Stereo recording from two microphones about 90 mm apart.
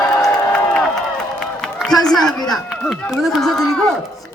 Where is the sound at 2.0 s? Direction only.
5° left (ahead or behind).